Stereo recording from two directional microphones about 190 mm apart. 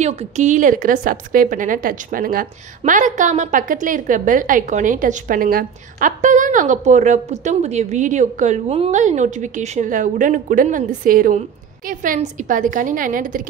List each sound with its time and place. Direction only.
0.0 s a woman's voice: 35° right (ahead or behind)